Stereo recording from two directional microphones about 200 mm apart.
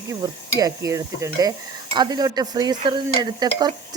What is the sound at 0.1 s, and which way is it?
Speech, 15° right (ahead or behind).